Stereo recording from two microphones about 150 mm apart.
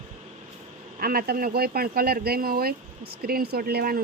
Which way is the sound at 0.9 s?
90° right.